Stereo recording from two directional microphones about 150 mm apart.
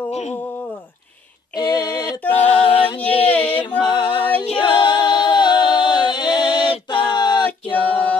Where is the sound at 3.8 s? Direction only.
30° left (ahead or behind).